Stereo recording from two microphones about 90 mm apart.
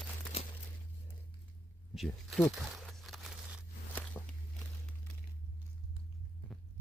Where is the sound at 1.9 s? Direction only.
Centre (ahead or behind).